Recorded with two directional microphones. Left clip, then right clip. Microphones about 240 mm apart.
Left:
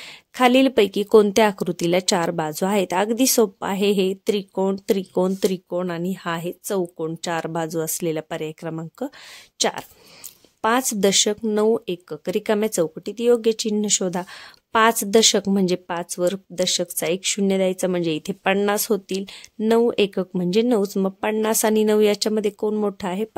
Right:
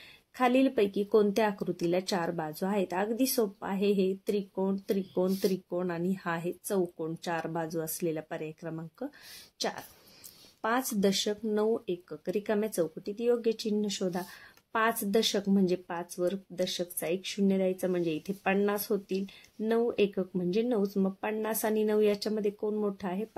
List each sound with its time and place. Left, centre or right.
0.4 s speech: left